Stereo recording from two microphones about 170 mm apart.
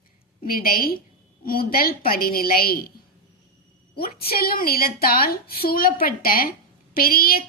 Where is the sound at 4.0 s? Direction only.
65° left (ahead or behind).